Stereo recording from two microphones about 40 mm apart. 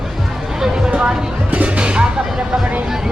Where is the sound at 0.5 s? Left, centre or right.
Centre.